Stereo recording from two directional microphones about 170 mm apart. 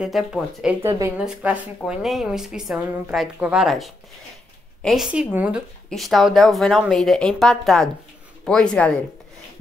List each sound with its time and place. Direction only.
0.0 s a woman's voice: centre (ahead or behind)
0.8 s speech: 15° right (ahead or behind)
1.1 s a woman's voice: 5° right (ahead or behind)